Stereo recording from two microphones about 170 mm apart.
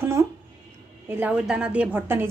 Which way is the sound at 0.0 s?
15° right (ahead or behind).